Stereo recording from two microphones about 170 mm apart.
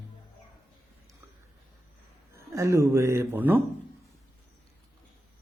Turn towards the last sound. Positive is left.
turn(degrees=-10)  # may be behind; listen again after turning